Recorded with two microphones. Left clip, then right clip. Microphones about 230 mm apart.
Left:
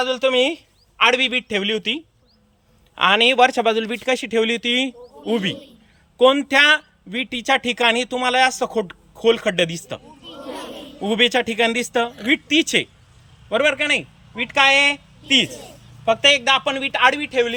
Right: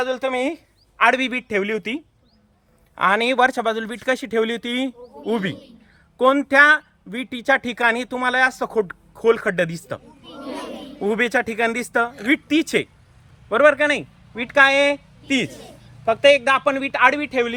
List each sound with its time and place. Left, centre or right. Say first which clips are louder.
0.0 s a man's voice: left 4 dB; right
10.2 s children playing: even; left
11.0 s a man's voice: left 2 dB; right